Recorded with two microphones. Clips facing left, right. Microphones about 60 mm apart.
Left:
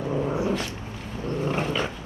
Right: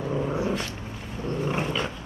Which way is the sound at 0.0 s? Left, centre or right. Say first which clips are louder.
Left 1 dB; centre.